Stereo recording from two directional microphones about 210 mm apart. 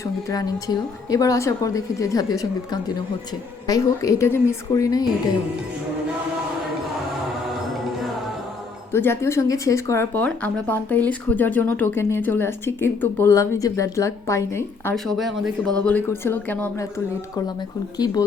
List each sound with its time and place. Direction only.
0.0 s speech: 15° left (ahead or behind)
3.7 s speech: 15° left (ahead or behind)
8.9 s speech: 10° left (ahead or behind)
14.9 s a woman's voice: centre (ahead or behind)
17.9 s speech: 20° left (ahead or behind)